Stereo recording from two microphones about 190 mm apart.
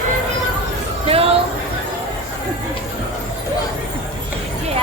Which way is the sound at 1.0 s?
30° right (ahead or behind).